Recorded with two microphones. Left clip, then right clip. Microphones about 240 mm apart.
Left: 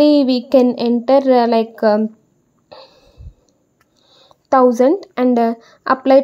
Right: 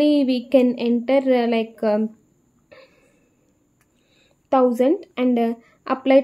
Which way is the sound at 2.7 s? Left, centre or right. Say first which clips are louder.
Left 8 dB; centre.